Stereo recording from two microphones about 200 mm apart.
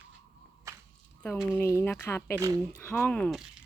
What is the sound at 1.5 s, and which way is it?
Speech, 10° left (ahead or behind).